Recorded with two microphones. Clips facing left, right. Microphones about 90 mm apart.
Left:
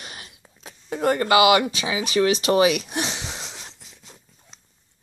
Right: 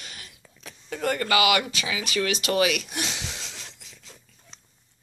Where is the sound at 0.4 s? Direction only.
25° left (ahead or behind).